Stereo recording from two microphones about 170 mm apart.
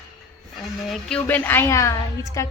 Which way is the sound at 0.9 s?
5° left (ahead or behind).